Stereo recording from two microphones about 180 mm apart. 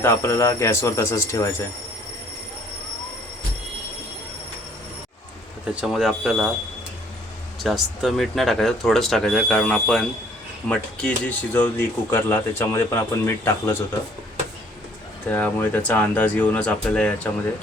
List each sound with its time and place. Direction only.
0.0 s speech: 15° left (ahead or behind)
5.7 s speech: centre (ahead or behind)
7.6 s speech: centre (ahead or behind)
15.3 s speech: 10° left (ahead or behind)